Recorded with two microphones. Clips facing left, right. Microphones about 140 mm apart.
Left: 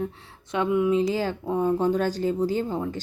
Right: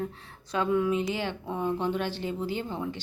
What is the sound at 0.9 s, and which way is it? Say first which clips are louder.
Speech: left 6 dB; 35° left (ahead or behind).